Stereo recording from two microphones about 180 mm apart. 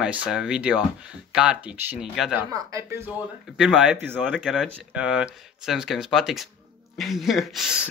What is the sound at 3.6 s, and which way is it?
Speech, 5° right (ahead or behind).